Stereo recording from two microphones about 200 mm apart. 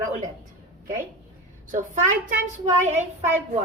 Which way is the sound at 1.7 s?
40° right (ahead or behind).